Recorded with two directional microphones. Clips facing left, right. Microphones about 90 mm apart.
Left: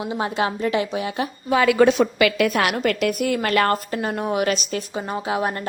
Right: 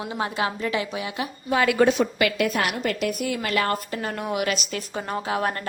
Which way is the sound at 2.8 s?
70° left (ahead or behind).